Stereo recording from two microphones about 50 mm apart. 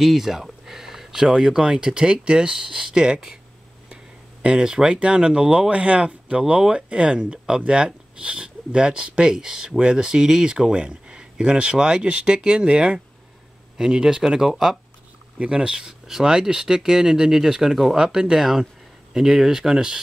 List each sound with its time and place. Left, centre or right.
0.0 s speech: centre
15.3 s speech: right